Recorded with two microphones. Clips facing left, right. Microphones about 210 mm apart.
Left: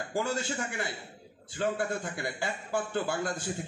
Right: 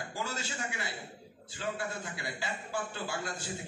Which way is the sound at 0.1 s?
50° left (ahead or behind).